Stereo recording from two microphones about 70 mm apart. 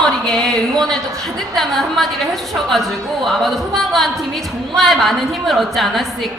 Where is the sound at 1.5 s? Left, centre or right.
Centre.